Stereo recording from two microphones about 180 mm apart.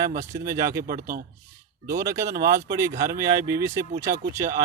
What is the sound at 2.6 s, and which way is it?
Speech, 15° right (ahead or behind).